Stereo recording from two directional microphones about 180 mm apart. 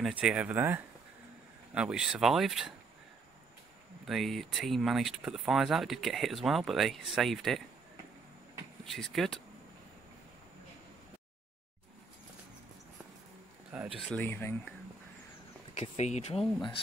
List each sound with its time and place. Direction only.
0.0 s speech: 5° right (ahead or behind)
4.0 s speech: centre (ahead or behind)
8.9 s speech: centre (ahead or behind)
13.9 s speech: 5° left (ahead or behind)
15.7 s speech: 40° left (ahead or behind)